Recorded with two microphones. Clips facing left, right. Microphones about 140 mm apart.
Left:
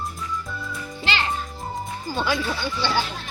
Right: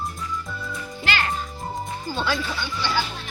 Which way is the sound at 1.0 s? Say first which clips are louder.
Even; 25° left (ahead or behind).